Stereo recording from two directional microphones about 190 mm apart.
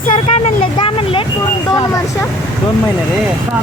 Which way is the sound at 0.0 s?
30° left (ahead or behind).